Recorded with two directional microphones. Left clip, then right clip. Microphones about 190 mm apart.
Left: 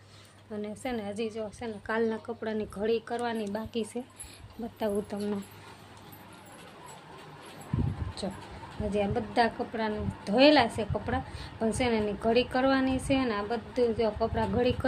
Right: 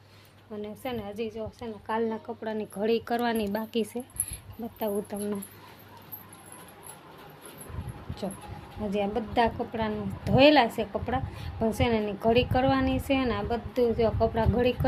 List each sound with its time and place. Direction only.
0.5 s a woman's voice: centre (ahead or behind)
2.8 s speech: 50° right (ahead or behind)
4.8 s a woman's voice: centre (ahead or behind)
8.2 s a woman's voice: 5° right (ahead or behind)